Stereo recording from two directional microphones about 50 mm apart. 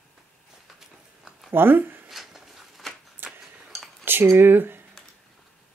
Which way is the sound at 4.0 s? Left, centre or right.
Right.